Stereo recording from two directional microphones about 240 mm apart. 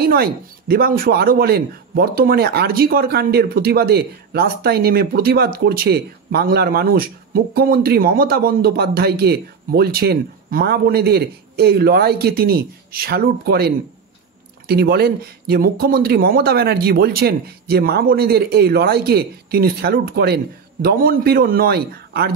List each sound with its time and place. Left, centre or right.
0.0 s speech: right